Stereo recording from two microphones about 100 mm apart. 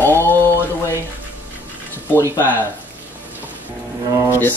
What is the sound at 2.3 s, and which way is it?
Speech, 20° left (ahead or behind).